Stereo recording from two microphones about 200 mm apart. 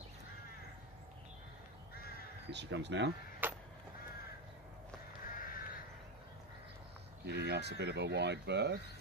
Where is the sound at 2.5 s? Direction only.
60° right (ahead or behind).